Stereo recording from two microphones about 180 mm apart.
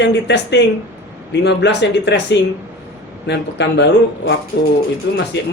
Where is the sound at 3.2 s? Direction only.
70° left (ahead or behind).